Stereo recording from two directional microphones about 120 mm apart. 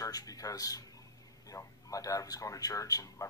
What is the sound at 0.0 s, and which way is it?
A man's voice, 30° left (ahead or behind).